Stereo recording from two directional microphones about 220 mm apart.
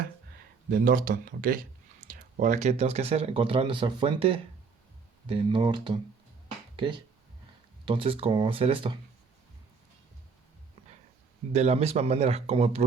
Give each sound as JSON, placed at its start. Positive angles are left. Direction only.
{"t": 0.7, "sound": "speech", "side_deg": -40}
{"t": 11.5, "sound": "speech", "side_deg": -30}